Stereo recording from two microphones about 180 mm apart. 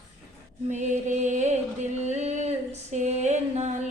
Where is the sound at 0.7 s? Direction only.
40° right (ahead or behind).